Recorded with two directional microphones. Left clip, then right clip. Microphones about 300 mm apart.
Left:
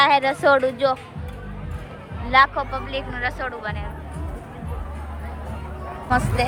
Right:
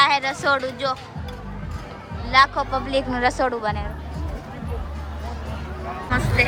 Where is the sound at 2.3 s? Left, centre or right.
Centre.